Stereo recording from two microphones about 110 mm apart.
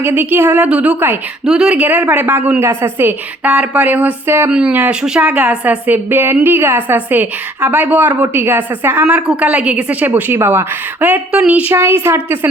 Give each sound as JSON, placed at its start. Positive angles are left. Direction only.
{"t": 0.0, "sound": "a woman's voice", "side_deg": -20}
{"t": 1.5, "sound": "a woman's voice", "side_deg": -5}